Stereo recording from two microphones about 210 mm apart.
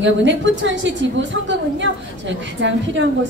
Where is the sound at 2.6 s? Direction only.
60° right (ahead or behind).